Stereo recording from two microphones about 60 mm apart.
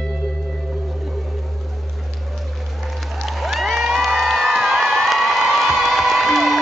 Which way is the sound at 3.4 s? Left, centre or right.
Centre.